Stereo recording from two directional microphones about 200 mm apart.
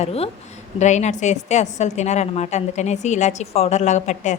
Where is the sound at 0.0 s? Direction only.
30° left (ahead or behind).